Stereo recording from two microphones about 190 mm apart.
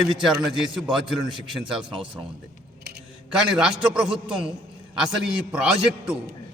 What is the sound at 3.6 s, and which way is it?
Speech, 5° right (ahead or behind).